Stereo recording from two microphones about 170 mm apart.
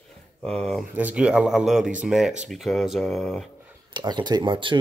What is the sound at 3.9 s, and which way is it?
Speech, 25° right (ahead or behind).